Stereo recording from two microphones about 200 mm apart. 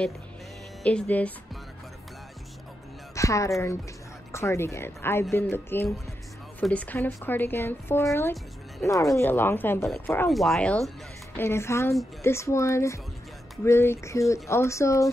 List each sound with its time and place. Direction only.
0.8 s speech: 5° left (ahead or behind)
3.2 s speech: 15° left (ahead or behind)